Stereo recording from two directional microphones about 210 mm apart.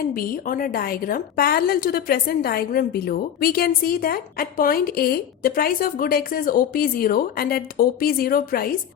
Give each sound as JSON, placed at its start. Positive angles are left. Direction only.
{"t": 0.1, "sound": "a woman's voice", "side_deg": 40}